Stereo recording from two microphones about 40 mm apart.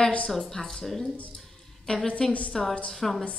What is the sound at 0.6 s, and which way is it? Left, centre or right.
Speech, centre.